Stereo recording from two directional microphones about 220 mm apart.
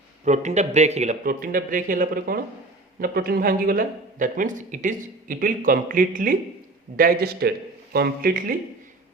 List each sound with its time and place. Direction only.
0.3 s a man's voice: 30° right (ahead or behind)